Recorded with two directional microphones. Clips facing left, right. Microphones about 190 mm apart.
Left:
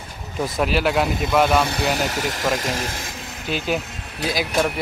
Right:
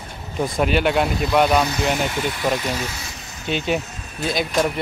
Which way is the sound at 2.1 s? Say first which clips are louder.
Right 1 dB; 40° left (ahead or behind).